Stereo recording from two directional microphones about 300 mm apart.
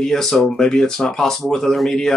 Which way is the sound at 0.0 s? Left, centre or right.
Centre.